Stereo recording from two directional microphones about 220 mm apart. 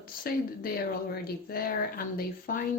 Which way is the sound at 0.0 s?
40° left (ahead or behind).